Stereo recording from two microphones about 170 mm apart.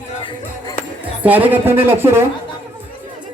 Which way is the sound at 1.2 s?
10° right (ahead or behind).